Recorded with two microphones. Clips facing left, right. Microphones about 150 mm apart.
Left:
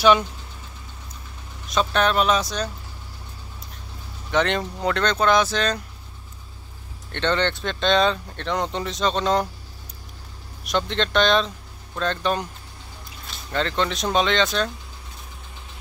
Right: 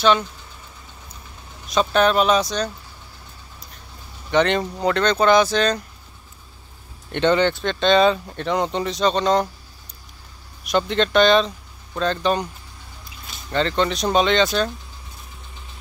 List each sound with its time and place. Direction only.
1.7 s speech: centre (ahead or behind)
4.3 s speech: centre (ahead or behind)
7.1 s speech: 10° right (ahead or behind); by 9.5 s 5° left (ahead or behind)
10.6 s speech: centre (ahead or behind)